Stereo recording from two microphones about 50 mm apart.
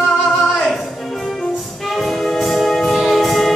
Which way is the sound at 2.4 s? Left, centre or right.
Centre.